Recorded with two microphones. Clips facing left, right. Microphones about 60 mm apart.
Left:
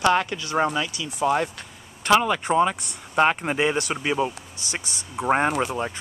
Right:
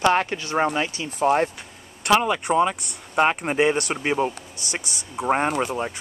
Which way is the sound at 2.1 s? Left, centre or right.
Centre.